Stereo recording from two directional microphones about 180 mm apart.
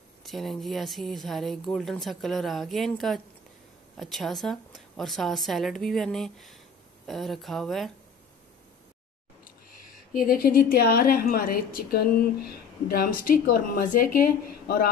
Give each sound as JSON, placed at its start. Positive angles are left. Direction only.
{"t": 0.2, "sound": "speech", "side_deg": 0}
{"t": 10.1, "sound": "a woman's voice", "side_deg": 55}